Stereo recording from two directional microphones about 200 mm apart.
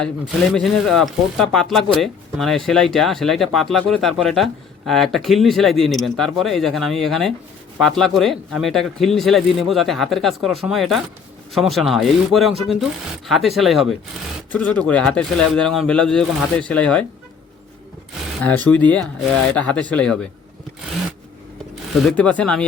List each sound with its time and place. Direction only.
0.5 s speech: centre (ahead or behind)
18.4 s speech: 5° left (ahead or behind)
22.1 s speech: 5° left (ahead or behind)